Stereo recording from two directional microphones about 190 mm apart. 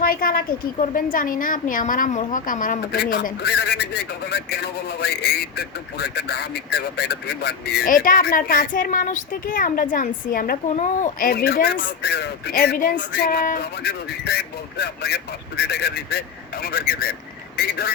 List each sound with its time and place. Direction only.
0.0 s a woman's voice: 50° left (ahead or behind)
13.0 s a woman's voice: 55° left (ahead or behind)